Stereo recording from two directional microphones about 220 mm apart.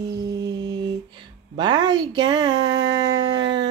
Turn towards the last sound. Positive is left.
turn(degrees=-20)  # may be behind; listen again after turning